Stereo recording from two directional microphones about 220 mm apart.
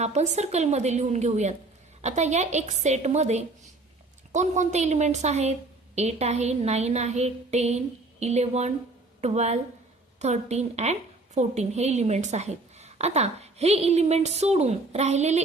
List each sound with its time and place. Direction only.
0.0 s a woman's voice: 30° right (ahead or behind)